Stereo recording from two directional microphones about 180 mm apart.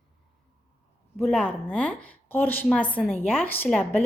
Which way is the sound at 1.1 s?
Centre (ahead or behind).